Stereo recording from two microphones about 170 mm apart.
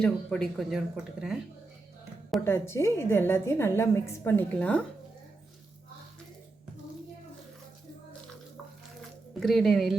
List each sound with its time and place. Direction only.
0.0 s speech: 5° left (ahead or behind)
2.4 s a woman's voice: 15° left (ahead or behind)
9.4 s speech: centre (ahead or behind)